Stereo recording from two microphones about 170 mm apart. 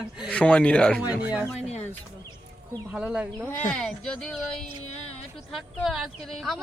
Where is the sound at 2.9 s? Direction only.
5° right (ahead or behind).